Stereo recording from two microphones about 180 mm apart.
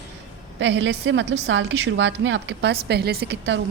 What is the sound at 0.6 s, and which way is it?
A woman's voice, 80° right.